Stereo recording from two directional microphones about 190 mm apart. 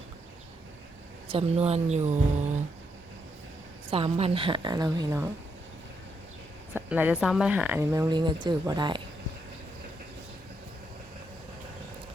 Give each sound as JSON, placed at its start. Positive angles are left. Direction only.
{"t": 1.3, "sound": "speech", "side_deg": -30}
{"t": 3.9, "sound": "a woman's voice", "side_deg": -30}
{"t": 6.7, "sound": "a woman's voice", "side_deg": -10}